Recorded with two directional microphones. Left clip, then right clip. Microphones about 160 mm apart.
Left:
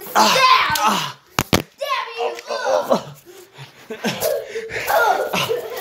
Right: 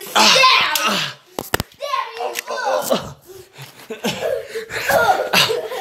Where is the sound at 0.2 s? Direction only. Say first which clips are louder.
Right 1 dB; 5° right (ahead or behind).